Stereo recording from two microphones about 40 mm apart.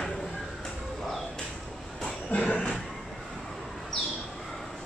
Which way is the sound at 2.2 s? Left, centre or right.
Left.